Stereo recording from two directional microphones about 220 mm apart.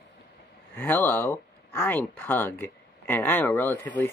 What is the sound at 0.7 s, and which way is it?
Speech, 10° left (ahead or behind).